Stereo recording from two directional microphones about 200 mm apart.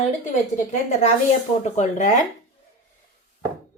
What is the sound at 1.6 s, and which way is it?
Speech, 35° left (ahead or behind).